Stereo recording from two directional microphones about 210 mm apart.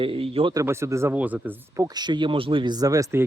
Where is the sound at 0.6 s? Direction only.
10° right (ahead or behind).